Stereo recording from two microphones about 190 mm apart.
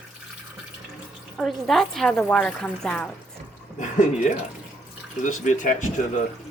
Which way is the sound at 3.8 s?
40° left (ahead or behind).